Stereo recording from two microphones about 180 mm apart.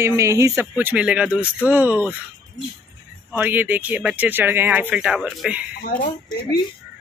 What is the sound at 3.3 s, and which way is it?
Speech, 10° right (ahead or behind).